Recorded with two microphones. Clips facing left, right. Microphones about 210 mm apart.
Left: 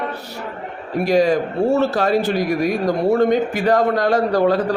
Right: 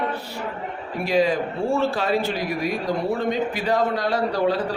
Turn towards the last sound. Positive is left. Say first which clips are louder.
# left 5 dB
turn(degrees=50)  # may be behind; listen again after turning